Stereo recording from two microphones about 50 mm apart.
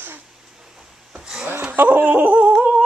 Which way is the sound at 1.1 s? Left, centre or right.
Centre.